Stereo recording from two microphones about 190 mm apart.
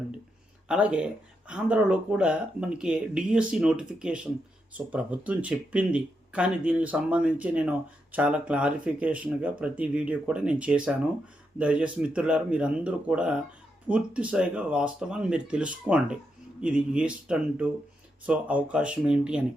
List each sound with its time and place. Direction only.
0.7 s speech: 5° right (ahead or behind)